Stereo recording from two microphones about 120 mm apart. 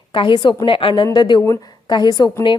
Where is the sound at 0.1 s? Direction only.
45° left (ahead or behind).